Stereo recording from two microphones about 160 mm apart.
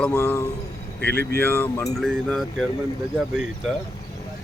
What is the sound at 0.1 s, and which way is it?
Speech, 15° left (ahead or behind).